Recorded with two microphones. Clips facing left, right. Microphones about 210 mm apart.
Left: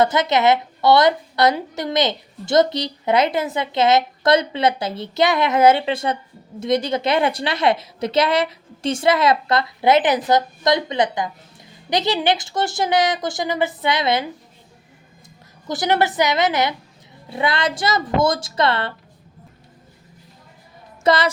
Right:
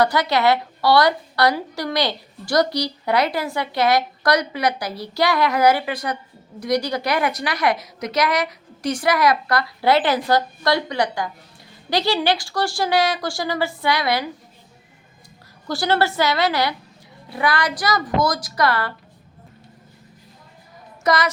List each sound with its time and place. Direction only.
0.0 s a woman's voice: 20° left (ahead or behind)
15.6 s a woman's voice: 20° left (ahead or behind)
21.0 s speech: 25° left (ahead or behind)